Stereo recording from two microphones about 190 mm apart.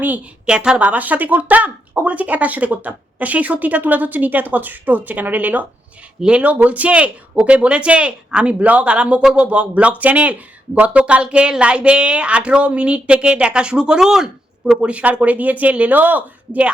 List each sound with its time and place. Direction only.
0.0 s speech: 5° right (ahead or behind)